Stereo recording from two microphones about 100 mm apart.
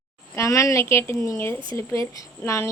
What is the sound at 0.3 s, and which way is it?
Speech, 30° left (ahead or behind).